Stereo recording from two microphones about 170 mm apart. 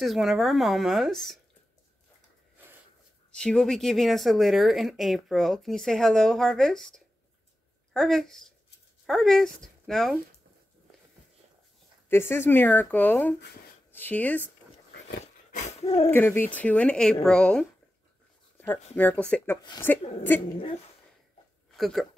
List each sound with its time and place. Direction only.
0.0 s speech: centre (ahead or behind)
3.3 s speech: 5° left (ahead or behind)
12.1 s speech: 15° left (ahead or behind)
15.5 s a sound: 40° left (ahead or behind)
16.1 s speech: 15° left (ahead or behind)
19.2 s speech: 10° left (ahead or behind)
21.7 s speech: centre (ahead or behind)